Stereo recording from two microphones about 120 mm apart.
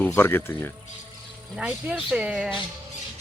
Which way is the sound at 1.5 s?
10° right (ahead or behind).